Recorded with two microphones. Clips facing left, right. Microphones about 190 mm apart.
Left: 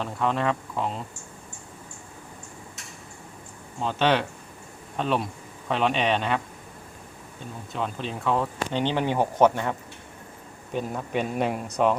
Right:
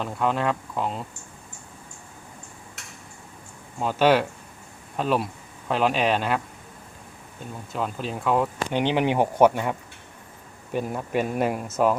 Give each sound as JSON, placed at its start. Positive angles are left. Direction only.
{"t": 0.0, "sound": "speech", "side_deg": 0}
{"t": 3.8, "sound": "speech", "side_deg": -5}
{"t": 7.7, "sound": "speech", "side_deg": -5}